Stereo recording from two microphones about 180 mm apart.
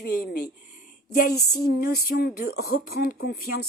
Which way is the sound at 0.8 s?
55° left (ahead or behind).